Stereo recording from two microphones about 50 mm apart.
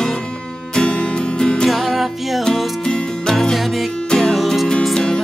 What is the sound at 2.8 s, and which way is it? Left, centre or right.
Music, centre.